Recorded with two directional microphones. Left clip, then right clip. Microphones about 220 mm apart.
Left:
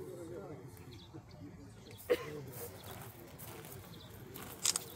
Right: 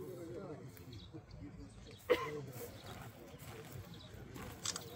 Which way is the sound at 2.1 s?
45° right (ahead or behind).